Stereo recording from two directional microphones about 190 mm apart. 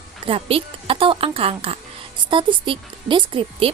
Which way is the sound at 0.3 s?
30° right (ahead or behind).